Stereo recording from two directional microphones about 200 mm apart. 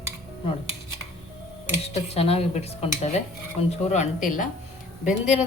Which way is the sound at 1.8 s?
30° left (ahead or behind).